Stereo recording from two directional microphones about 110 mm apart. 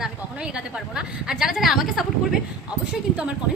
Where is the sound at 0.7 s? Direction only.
5° right (ahead or behind).